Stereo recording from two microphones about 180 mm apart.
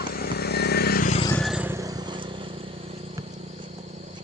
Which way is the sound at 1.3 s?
Centre (ahead or behind).